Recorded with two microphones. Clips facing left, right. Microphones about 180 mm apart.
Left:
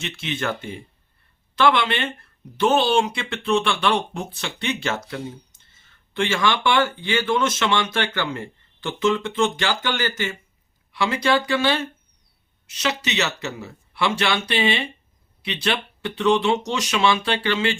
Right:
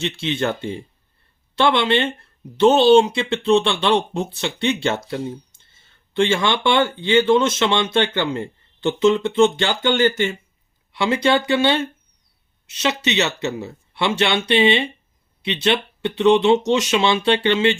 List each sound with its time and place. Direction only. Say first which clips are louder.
0.0 s speech: right 5 dB; 30° right (ahead or behind)